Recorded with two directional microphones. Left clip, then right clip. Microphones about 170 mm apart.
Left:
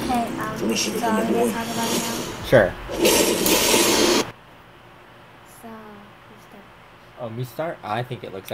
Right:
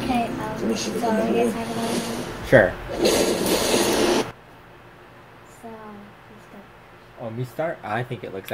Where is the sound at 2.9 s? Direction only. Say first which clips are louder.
Left 2 dB; 30° left (ahead or behind).